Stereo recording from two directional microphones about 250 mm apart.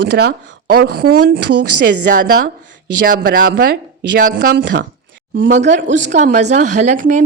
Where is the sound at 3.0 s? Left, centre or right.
Right.